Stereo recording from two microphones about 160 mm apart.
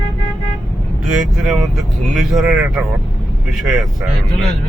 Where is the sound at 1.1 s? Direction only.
Centre (ahead or behind).